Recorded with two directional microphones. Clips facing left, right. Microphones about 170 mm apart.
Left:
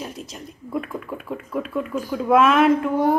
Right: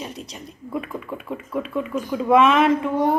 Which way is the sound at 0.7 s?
Centre (ahead or behind).